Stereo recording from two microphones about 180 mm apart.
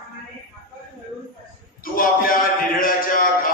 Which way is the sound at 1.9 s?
50° left (ahead or behind).